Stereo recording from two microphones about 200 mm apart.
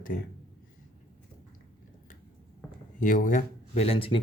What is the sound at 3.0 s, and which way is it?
Speech, 40° left (ahead or behind).